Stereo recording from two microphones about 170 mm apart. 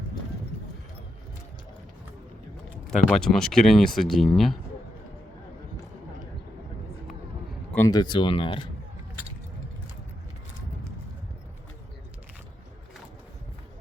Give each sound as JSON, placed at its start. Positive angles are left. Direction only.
{"t": 2.8, "sound": "speech", "side_deg": 5}
{"t": 7.8, "sound": "speech", "side_deg": 20}